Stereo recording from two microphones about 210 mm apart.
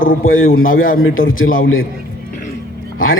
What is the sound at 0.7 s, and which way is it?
Speech, 40° left (ahead or behind).